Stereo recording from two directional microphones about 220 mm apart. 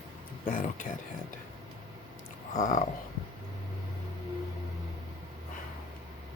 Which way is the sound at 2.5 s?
35° left (ahead or behind).